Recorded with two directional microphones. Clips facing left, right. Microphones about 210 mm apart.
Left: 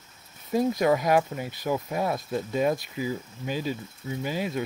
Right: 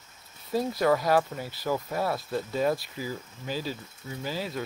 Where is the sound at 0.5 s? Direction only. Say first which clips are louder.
Left 2 dB; 15° left (ahead or behind).